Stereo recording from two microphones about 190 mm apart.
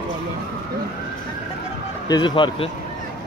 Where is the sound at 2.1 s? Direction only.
25° left (ahead or behind).